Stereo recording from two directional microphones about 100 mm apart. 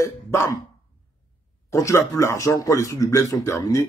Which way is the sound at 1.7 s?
30° left (ahead or behind).